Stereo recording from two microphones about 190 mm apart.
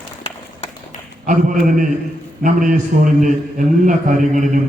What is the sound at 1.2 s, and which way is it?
A man's voice, 45° right (ahead or behind).